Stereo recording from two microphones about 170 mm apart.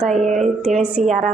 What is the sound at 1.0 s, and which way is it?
Speech, 50° right (ahead or behind).